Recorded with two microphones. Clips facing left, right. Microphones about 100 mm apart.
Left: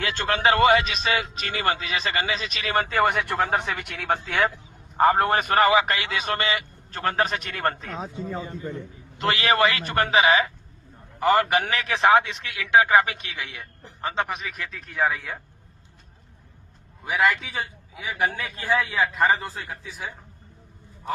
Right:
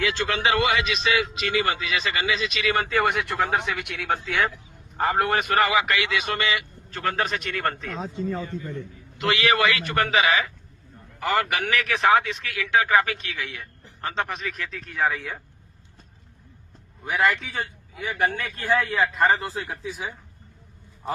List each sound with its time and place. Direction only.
0.0 s speech: 45° left (ahead or behind)
7.9 s a man's voice: 10° left (ahead or behind)
8.4 s a man's voice: 25° left (ahead or behind); by 15.4 s 5° left (ahead or behind)
17.1 s a man's voice: 5° left (ahead or behind)
19.8 s speech: 15° right (ahead or behind)